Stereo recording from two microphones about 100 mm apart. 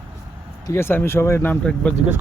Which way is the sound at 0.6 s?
25° left (ahead or behind).